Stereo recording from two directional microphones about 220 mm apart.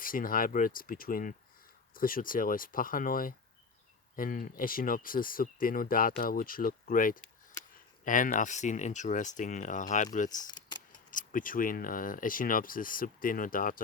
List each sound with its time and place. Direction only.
0.0 s speech: 40° left (ahead or behind)
10.4 s keys jangling: 20° left (ahead or behind)
11.1 s speech: 35° left (ahead or behind)